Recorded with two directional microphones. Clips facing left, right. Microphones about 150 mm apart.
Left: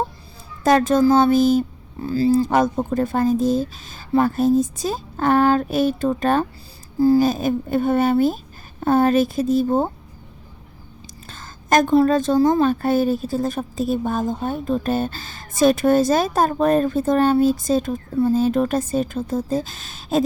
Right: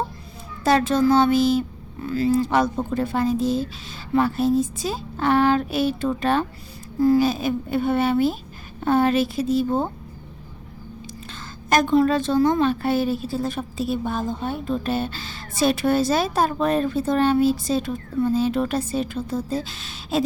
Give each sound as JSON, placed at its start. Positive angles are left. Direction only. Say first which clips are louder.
{"t": 0.6, "sound": "a woman's voice", "louder": "left 3 dB", "side_deg": 45}
{"t": 2.0, "sound": "speech", "louder": "left 3 dB", "side_deg": 30}
{"t": 2.4, "sound": "a woman's voice", "louder": "left 2 dB", "side_deg": 45}
{"t": 11.7, "sound": "a woman's voice", "louder": "left 3 dB", "side_deg": 45}